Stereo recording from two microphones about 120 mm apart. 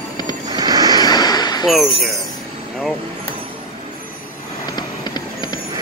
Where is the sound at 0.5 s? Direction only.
30° right (ahead or behind).